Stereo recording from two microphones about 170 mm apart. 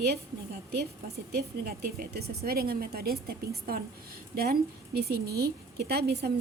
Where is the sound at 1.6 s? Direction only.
60° right (ahead or behind).